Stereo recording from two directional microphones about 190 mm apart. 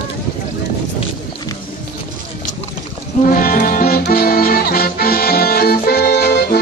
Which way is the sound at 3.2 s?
45° left (ahead or behind).